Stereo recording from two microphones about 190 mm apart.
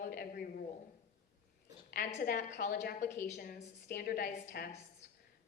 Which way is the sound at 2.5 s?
40° left (ahead or behind).